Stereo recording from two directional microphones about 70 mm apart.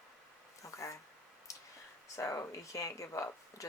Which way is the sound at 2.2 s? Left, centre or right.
Left.